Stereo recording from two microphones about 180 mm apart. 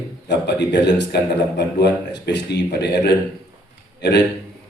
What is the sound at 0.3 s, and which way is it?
A man's voice, 70° left (ahead or behind).